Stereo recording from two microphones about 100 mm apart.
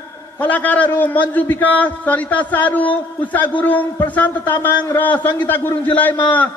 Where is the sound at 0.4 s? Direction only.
15° left (ahead or behind).